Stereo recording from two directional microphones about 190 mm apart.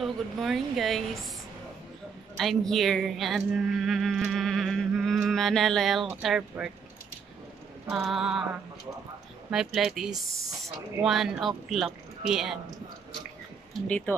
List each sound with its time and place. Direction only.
0.0 s speech: centre (ahead or behind)
2.3 s speech: centre (ahead or behind)
7.9 s speech: centre (ahead or behind)
9.5 s speech: centre (ahead or behind)
10.3 s speech: 15° right (ahead or behind)
11.0 s speech: centre (ahead or behind)
13.8 s speech: 5° left (ahead or behind)